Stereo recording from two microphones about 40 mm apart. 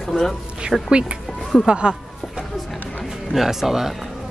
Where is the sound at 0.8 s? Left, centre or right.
Right.